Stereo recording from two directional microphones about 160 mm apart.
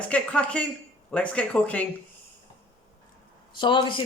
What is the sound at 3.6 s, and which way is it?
Speech, 30° left (ahead or behind).